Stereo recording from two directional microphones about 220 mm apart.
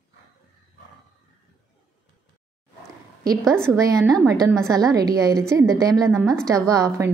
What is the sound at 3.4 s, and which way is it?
Speech, 5° left (ahead or behind).